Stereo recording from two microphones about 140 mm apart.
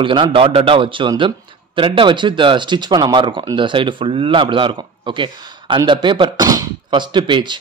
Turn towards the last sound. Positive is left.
turn(degrees=-35)  # may be behind; listen again after turning